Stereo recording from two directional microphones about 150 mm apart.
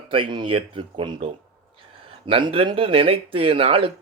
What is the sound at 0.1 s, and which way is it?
Speech, 30° right (ahead or behind).